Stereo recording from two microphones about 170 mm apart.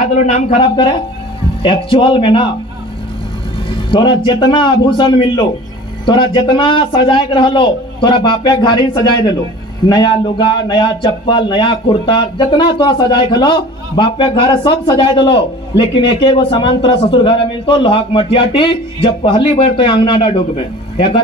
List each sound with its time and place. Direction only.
0.0 s speech: 45° left (ahead or behind)
1.6 s speech: 30° left (ahead or behind)
3.9 s speech: 30° left (ahead or behind)